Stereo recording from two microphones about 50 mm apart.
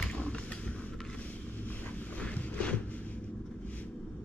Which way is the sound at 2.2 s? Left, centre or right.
Left.